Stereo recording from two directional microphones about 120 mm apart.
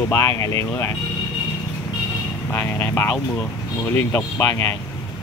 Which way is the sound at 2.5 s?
20° left (ahead or behind).